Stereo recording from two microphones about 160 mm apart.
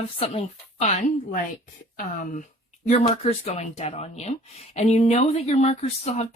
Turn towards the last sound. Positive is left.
turn(degrees=45)  # may be behind; listen again after turning